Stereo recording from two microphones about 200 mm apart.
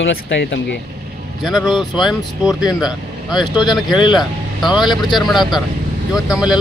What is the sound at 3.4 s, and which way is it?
Speech, 20° left (ahead or behind).